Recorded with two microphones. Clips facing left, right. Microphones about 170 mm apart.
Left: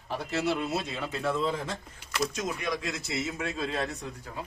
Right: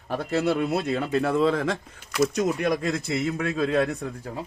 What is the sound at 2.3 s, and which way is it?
A man's voice, 60° right (ahead or behind).